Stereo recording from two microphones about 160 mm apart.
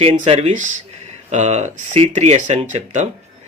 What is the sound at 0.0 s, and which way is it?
A man's voice, 40° right (ahead or behind).